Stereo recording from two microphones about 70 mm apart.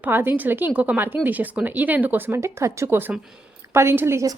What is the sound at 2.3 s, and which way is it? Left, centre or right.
A woman's voice, right.